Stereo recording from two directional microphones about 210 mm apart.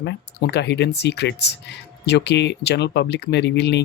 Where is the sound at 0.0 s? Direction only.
55° left (ahead or behind).